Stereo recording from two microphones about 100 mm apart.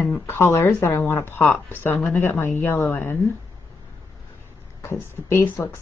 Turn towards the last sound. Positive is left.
turn(degrees=20)  # may be behind; listen again after turning